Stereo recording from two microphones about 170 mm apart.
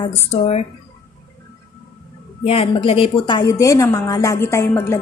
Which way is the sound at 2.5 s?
35° left (ahead or behind).